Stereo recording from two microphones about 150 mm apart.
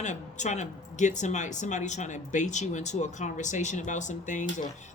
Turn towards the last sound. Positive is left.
turn(degrees=55)  # may be behind; listen again after turning